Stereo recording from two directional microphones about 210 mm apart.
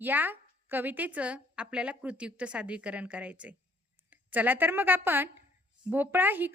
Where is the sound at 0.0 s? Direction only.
10° right (ahead or behind).